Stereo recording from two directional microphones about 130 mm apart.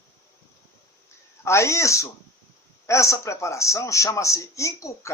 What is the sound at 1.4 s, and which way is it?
Speech, 20° left (ahead or behind).